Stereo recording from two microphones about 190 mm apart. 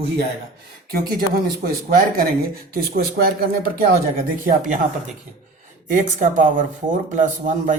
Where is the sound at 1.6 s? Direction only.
50° right (ahead or behind).